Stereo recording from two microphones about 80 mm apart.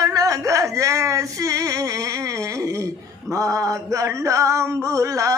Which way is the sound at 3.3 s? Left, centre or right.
Right.